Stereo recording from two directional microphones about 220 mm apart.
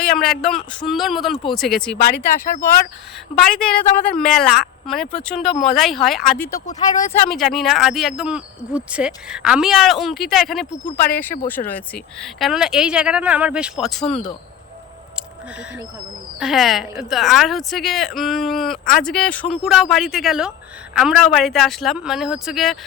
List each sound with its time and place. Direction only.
0.0 s speech: centre (ahead or behind)
2.0 s speech: 45° left (ahead or behind)
3.4 s speech: centre (ahead or behind)
16.4 s speech: centre (ahead or behind)